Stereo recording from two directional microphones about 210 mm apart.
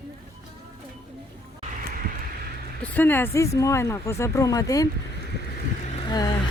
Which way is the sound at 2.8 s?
10° left (ahead or behind).